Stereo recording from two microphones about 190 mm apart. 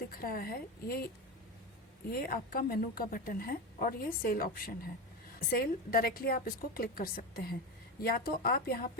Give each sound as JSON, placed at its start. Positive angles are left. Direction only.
{"t": 0.1, "sound": "a woman's voice", "side_deg": 50}
{"t": 2.1, "sound": "a woman's voice", "side_deg": 50}